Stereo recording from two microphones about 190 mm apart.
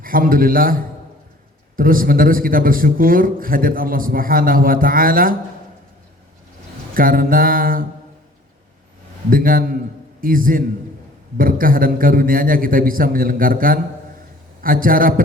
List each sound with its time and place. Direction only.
0.0 s a man's voice: 50° right (ahead or behind)
6.9 s a man's voice: 50° right (ahead or behind)
9.3 s a man's voice: 50° right (ahead or behind)